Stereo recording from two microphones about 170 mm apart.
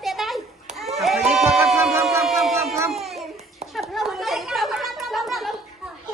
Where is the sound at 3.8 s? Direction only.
Centre (ahead or behind).